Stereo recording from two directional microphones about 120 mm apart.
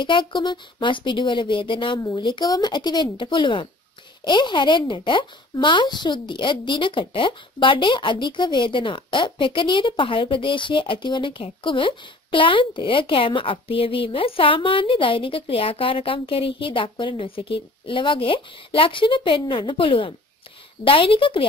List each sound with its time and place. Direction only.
0.0 s speech: 45° left (ahead or behind)